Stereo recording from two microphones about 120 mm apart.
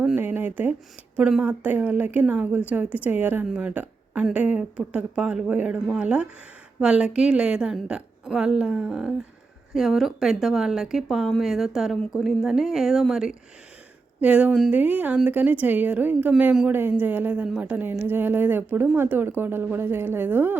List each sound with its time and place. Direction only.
0.2 s speech: 15° right (ahead or behind)